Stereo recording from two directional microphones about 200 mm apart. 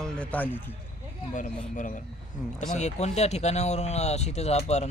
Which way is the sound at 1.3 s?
40° left (ahead or behind).